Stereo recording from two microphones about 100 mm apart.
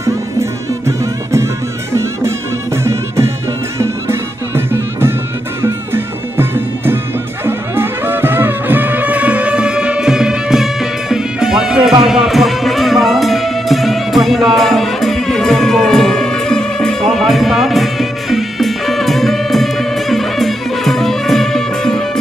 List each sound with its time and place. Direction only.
0.0 s music: 30° right (ahead or behind)
2.8 s music: 30° right (ahead or behind); by 22.2 s 5° left (ahead or behind)